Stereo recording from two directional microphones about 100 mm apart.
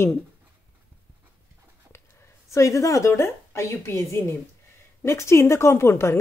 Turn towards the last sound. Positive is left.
turn(degrees=25)  # may be behind; listen again after turning